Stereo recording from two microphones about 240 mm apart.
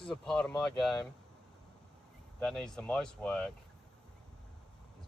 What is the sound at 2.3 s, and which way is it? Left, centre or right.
Speech, centre.